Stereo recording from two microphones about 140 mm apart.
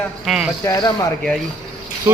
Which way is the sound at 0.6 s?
30° left (ahead or behind).